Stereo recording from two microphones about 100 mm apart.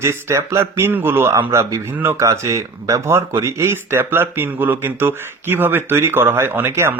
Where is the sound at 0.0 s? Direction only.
25° right (ahead or behind).